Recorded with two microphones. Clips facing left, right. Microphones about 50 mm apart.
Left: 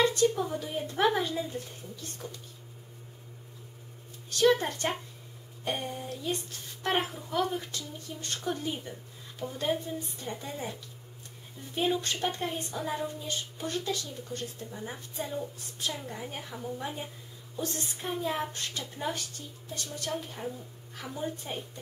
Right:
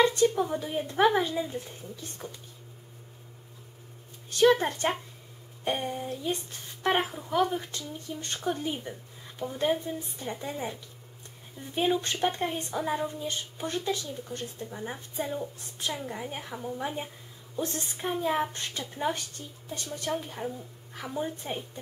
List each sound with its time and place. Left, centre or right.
0.0 s a sound: centre
0.5 s speech: centre
4.5 s speech: centre